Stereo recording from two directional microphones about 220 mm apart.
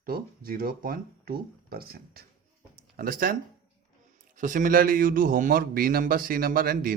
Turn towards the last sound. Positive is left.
turn(degrees=-40)  # may be behind; listen again after turning